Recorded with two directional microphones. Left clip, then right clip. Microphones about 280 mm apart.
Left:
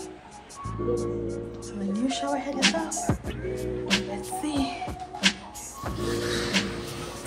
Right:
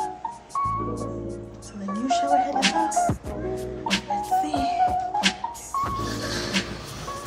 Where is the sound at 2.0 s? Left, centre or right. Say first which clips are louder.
Right 9 dB; centre.